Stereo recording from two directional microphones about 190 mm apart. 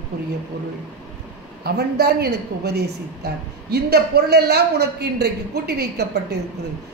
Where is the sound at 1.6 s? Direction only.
55° right (ahead or behind).